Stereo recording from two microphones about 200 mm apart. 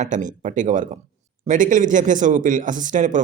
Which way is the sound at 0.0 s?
40° right (ahead or behind).